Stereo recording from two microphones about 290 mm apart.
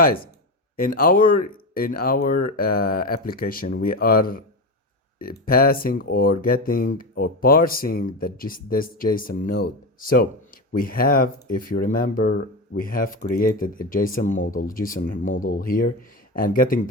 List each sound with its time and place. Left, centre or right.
0.8 s speech: left